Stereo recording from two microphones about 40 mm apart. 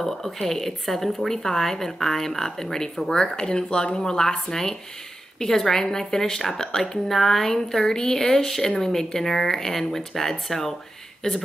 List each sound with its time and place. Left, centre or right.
0.0 s speech: centre